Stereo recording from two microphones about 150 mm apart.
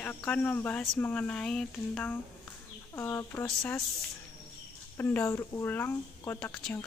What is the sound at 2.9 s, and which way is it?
Speech, 20° left (ahead or behind).